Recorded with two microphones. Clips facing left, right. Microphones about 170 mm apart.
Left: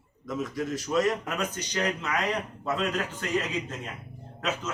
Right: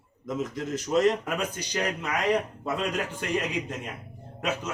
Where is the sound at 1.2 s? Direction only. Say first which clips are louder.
Right 1 dB; 10° right (ahead or behind).